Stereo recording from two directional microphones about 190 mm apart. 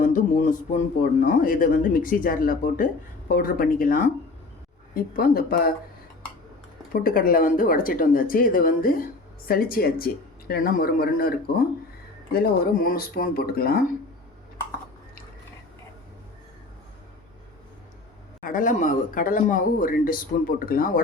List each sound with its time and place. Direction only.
0.0 s a sound: 45° left (ahead or behind)
1.3 s speech: 45° left (ahead or behind)
6.9 s speech: 50° left (ahead or behind)
18.4 s speech: 45° left (ahead or behind)